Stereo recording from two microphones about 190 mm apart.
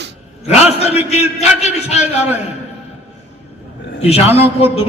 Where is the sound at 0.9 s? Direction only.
35° left (ahead or behind).